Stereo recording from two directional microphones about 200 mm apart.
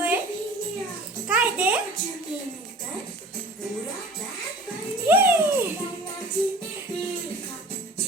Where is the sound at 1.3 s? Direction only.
5° right (ahead or behind).